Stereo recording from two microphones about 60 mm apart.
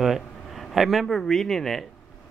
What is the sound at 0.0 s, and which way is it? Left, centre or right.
A man's voice, centre.